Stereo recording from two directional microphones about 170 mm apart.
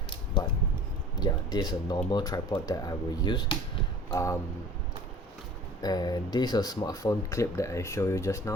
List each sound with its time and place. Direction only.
1.2 s speech: 25° left (ahead or behind)
5.8 s speech: 25° left (ahead or behind)